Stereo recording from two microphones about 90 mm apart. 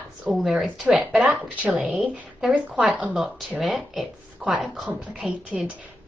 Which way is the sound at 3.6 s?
Centre (ahead or behind).